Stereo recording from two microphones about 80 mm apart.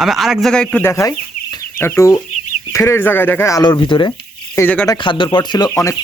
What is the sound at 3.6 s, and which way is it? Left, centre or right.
Speech, left.